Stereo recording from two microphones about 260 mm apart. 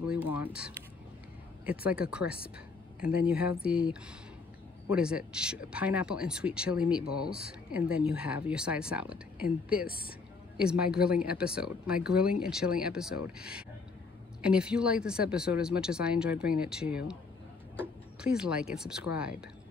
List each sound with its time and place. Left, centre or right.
0.3 s speech: centre
3.0 s speech: left
3.3 s speech: centre
4.9 s speech: centre
9.8 s speech: left
10.6 s speech: centre
18.2 s speech: centre